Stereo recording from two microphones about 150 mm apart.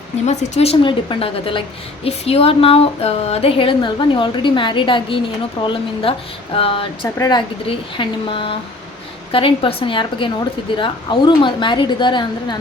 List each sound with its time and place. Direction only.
0.3 s a woman's voice: 45° left (ahead or behind)